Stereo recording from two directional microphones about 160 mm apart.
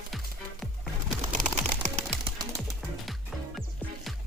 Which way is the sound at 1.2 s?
55° right (ahead or behind).